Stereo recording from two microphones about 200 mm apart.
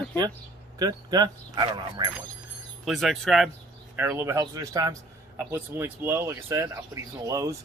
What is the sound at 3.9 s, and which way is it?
Speech, 10° right (ahead or behind).